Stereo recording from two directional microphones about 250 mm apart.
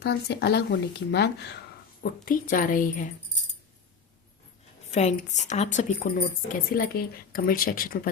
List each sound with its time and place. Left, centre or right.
0.0 s a woman's voice: left
4.9 s a woman's voice: left